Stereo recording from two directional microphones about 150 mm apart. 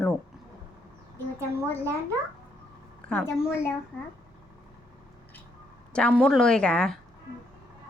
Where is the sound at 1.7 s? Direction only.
15° left (ahead or behind).